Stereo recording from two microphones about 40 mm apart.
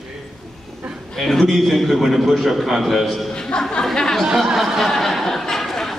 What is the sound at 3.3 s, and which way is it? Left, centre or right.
Speech, left.